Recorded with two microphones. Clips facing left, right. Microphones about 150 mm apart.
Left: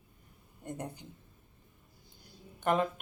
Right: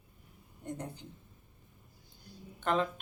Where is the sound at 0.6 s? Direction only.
10° left (ahead or behind).